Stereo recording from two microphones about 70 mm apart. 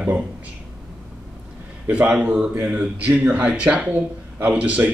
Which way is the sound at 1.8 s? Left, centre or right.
Centre.